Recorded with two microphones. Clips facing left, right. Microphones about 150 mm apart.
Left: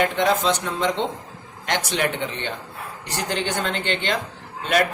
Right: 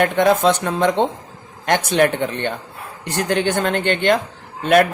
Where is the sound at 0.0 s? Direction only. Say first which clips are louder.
Right 5 dB; 55° right (ahead or behind).